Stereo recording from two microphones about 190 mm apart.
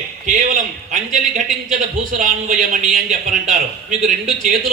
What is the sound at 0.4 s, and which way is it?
A man's voice, 45° right (ahead or behind).